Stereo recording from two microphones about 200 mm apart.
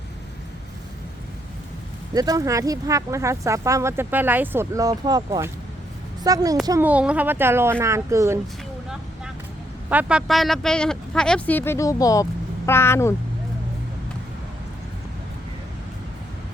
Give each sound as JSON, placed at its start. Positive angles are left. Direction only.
{"t": 2.1, "sound": "speech", "side_deg": -20}
{"t": 9.9, "sound": "speech", "side_deg": -5}